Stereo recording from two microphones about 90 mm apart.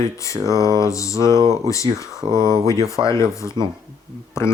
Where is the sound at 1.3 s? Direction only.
50° right (ahead or behind).